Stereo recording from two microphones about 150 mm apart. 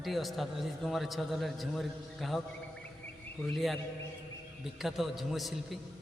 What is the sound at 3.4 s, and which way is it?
Speech, centre (ahead or behind).